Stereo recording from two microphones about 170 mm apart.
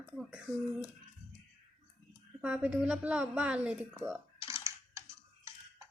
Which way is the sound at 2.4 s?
5° right (ahead or behind).